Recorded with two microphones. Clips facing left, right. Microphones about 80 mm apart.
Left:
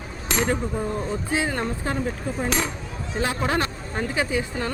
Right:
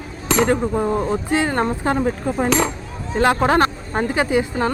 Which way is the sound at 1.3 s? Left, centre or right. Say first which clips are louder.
Right 6 dB; right.